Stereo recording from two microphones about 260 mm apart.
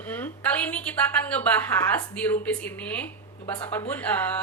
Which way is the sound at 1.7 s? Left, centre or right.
Centre.